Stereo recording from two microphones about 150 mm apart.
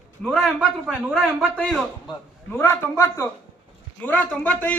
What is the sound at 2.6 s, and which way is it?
A man's voice, 15° left (ahead or behind).